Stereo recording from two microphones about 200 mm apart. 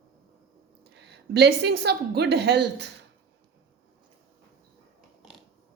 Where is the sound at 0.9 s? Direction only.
55° right (ahead or behind).